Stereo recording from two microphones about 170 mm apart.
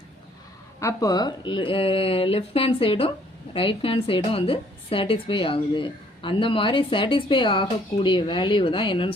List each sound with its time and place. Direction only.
0.8 s a woman's voice: 20° left (ahead or behind)